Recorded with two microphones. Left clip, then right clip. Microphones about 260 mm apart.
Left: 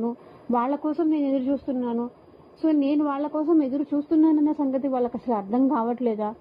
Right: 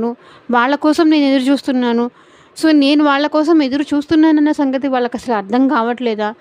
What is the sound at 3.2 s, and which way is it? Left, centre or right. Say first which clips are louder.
Speech: right 11 dB; right.